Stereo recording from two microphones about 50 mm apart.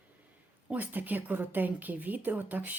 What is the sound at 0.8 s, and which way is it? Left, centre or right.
Speech, right.